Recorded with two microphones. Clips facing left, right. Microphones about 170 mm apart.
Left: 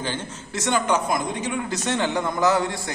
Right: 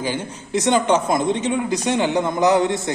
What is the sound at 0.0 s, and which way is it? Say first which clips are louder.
A man's voice: right 4 dB; 10° right (ahead or behind).